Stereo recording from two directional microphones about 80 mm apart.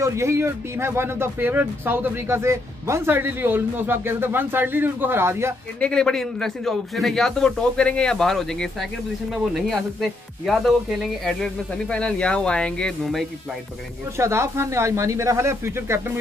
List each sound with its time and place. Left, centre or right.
0.0 s speech: right
5.8 s a man's voice: centre
11.2 s a man's voice: centre
14.1 s speech: right